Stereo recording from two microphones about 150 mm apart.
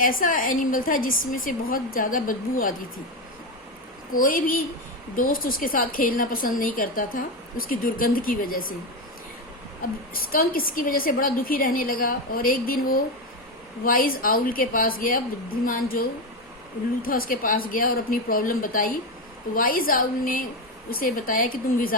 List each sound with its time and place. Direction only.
0.0 s a woman's voice: 65° left (ahead or behind)
4.2 s a woman's voice: 65° left (ahead or behind)
10.3 s a woman's voice: 70° left (ahead or behind)